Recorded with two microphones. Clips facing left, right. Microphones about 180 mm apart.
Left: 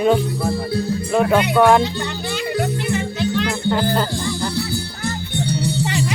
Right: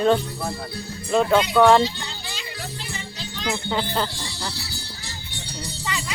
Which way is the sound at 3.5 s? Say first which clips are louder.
Left 6 dB; 5° left (ahead or behind).